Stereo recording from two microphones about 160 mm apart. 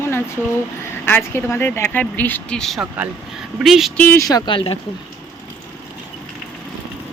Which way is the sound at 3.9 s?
15° left (ahead or behind).